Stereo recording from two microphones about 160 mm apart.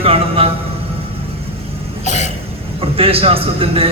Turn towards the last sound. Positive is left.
turn(degrees=-35)  # may be behind; listen again after turning